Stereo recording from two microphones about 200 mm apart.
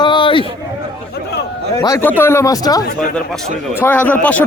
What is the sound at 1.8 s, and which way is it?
Speech, 15° left (ahead or behind).